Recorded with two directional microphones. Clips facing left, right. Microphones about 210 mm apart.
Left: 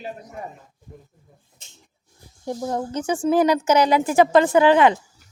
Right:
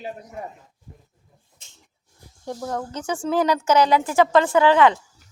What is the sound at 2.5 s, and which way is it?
Speech, 15° left (ahead or behind).